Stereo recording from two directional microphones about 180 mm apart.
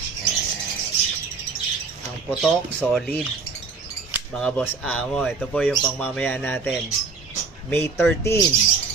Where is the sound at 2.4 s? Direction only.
5° left (ahead or behind).